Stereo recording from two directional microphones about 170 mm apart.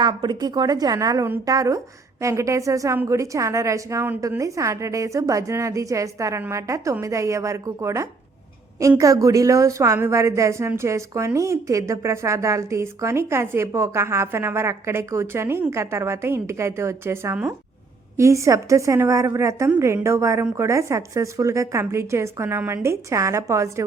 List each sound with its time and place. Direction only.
0.0 s a woman's voice: 25° right (ahead or behind)